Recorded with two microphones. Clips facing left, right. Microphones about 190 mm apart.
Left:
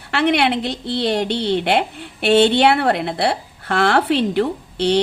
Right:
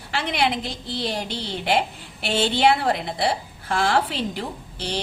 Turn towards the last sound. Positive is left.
turn(degrees=65)  # may be behind; listen again after turning